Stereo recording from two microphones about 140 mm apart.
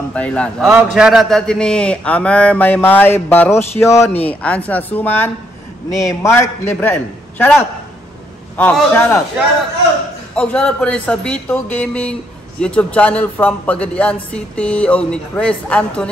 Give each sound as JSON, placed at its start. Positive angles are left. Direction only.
{"t": 0.1, "sound": "a woman's voice", "side_deg": 10}
{"t": 0.7, "sound": "a woman's voice", "side_deg": -10}
{"t": 8.7, "sound": "a woman's voice", "side_deg": 5}
{"t": 10.3, "sound": "a woman's voice", "side_deg": 5}